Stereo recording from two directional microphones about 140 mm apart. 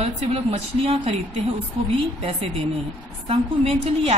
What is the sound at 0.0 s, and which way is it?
Speech, 45° right (ahead or behind).